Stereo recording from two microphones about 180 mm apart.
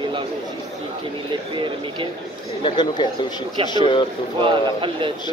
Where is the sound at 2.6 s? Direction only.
25° left (ahead or behind).